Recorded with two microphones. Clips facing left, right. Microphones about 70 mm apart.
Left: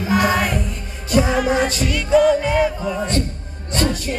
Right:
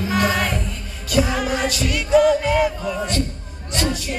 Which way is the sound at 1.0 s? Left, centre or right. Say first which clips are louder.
Left 3 dB; left.